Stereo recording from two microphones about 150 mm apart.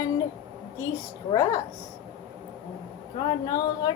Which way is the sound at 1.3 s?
25° left (ahead or behind).